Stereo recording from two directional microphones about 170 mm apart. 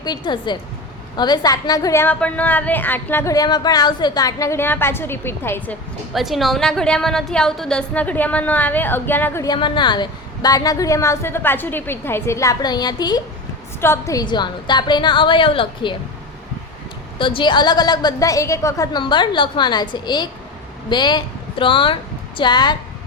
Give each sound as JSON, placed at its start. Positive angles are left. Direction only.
{"t": 0.0, "sound": "a woman's voice", "side_deg": 25}
{"t": 6.1, "sound": "a woman's voice", "side_deg": 0}
{"t": 17.2, "sound": "a woman's voice", "side_deg": 30}